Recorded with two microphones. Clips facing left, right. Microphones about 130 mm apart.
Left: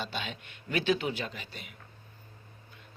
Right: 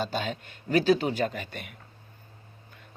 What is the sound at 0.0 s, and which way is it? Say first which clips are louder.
Speech: right 7 dB; 40° right (ahead or behind).